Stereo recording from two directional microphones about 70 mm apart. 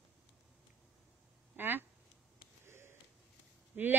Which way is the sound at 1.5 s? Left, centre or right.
Right.